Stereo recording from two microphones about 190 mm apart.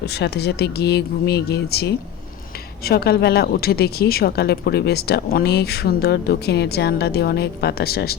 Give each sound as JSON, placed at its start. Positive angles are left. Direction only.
{"t": 0.0, "sound": "a woman's voice", "side_deg": 60}